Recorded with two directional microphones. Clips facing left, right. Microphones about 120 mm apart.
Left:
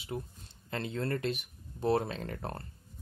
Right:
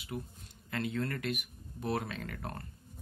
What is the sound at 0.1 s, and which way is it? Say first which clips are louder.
Speech: left 2 dB; 30° left (ahead or behind).